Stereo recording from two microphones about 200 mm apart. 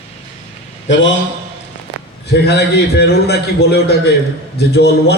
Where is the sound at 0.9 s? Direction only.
70° left (ahead or behind).